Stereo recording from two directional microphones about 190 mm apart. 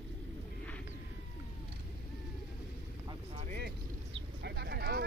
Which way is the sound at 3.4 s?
55° right (ahead or behind).